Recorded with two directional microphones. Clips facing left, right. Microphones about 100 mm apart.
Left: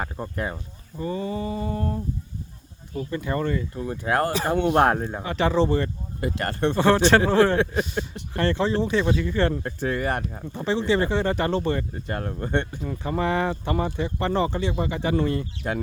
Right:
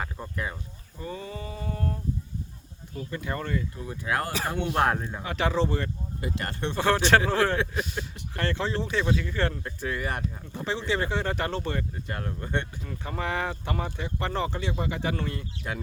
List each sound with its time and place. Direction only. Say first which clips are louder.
0.0 s speech: left 4 dB; 40° left (ahead or behind)
0.9 s speech: left 8 dB; centre (ahead or behind)
3.1 s speech: left 5 dB; centre (ahead or behind)
3.8 s speech: left 6 dB; 45° left (ahead or behind)
5.2 s speech: left 5 dB; centre (ahead or behind)
6.1 s speech: left 7 dB; 55° left (ahead or behind)
6.7 s speech: left 3 dB; centre (ahead or behind)
9.6 s speech: left 6 dB; 45° left (ahead or behind)
10.5 s speech: left 7 dB; centre (ahead or behind)
12.0 s speech: left 5 dB; 40° left (ahead or behind)
13.0 s speech: left 6 dB; centre (ahead or behind)
15.6 s speech: left 6 dB; 35° left (ahead or behind)